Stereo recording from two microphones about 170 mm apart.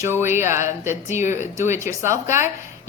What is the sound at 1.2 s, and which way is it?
Speech, 45° left (ahead or behind).